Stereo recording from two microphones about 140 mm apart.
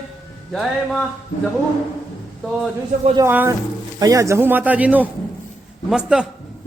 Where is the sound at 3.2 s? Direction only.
15° right (ahead or behind).